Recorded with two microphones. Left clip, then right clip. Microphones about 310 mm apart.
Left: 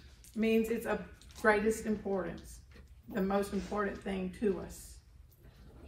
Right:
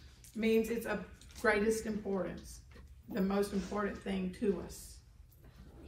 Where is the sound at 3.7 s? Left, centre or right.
Centre.